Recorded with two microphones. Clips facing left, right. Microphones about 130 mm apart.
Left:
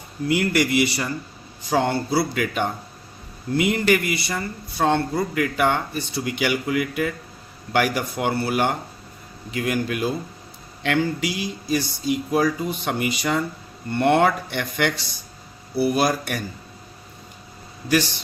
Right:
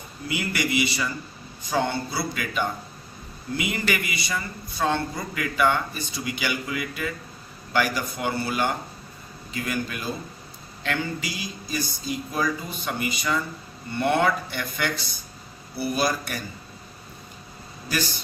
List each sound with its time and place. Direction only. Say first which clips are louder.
0.3 s speech: left 7 dB; 60° left (ahead or behind)
17.8 s speech: left 8 dB; 70° left (ahead or behind)